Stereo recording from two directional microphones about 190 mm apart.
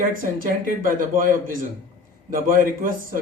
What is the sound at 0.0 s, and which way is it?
Speech, 45° right (ahead or behind).